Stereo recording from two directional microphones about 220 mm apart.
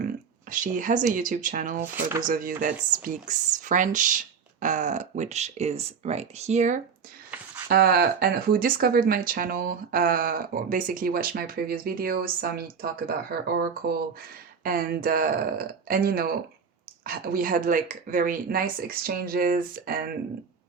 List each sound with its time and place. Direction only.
0.5 s speech: 35° right (ahead or behind)
1.8 s speech: 10° right (ahead or behind)
2.2 s speech: 40° right (ahead or behind)
7.7 s speech: 45° right (ahead or behind)